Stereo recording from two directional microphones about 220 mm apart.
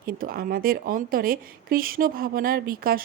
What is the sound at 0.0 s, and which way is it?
Speech, 40° right (ahead or behind).